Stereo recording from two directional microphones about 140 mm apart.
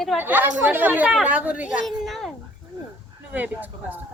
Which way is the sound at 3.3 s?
10° right (ahead or behind).